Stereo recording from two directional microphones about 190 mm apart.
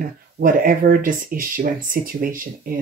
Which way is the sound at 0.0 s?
50° right (ahead or behind).